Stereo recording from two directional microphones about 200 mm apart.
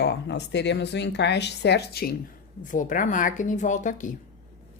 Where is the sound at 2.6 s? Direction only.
40° left (ahead or behind).